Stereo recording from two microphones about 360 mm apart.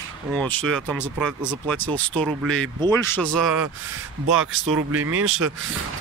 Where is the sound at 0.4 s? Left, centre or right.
Centre.